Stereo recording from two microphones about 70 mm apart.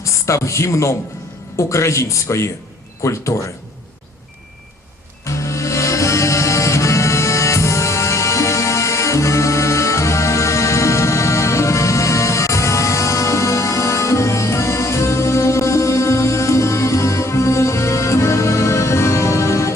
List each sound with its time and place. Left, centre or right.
0.0 s a man's voice: left
5.2 s music: left